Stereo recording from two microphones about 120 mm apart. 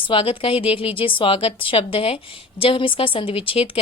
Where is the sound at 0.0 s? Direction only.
50° left (ahead or behind).